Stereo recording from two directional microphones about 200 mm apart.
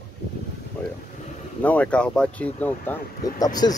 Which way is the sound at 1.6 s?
5° left (ahead or behind).